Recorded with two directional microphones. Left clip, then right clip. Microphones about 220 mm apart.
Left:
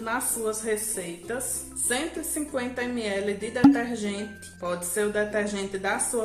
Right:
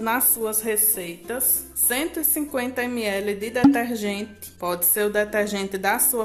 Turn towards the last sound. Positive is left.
turn(degrees=-35)  # may be behind; listen again after turning